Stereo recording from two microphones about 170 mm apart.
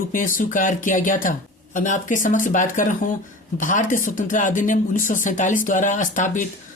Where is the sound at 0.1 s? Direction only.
50° left (ahead or behind).